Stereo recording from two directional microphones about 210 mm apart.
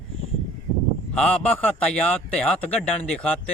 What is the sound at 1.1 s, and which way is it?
Speech, 5° left (ahead or behind).